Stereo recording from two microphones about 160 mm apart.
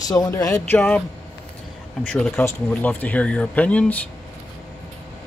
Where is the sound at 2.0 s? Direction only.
5° left (ahead or behind).